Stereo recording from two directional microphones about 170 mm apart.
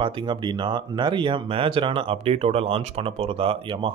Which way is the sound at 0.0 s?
25° right (ahead or behind).